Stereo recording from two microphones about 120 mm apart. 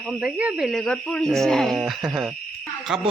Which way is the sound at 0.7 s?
5° left (ahead or behind).